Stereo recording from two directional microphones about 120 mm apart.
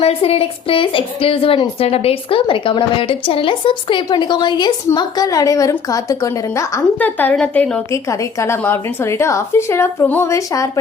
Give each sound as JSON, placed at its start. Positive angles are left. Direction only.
{"t": 0.0, "sound": "a woman's voice", "side_deg": 55}
{"t": 7.0, "sound": "a woman's voice", "side_deg": 15}
{"t": 7.9, "sound": "a woman's voice", "side_deg": 25}
{"t": 10.3, "sound": "a woman's voice", "side_deg": 30}